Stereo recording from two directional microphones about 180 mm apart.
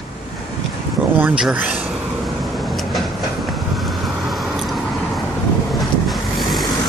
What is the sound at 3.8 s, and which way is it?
Vehicle, centre (ahead or behind).